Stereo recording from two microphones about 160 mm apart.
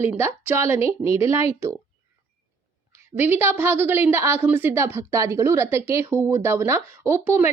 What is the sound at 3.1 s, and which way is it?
A woman's voice, 10° right (ahead or behind).